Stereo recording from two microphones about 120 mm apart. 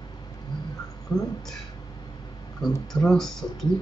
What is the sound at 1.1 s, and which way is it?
Speech, 35° left (ahead or behind).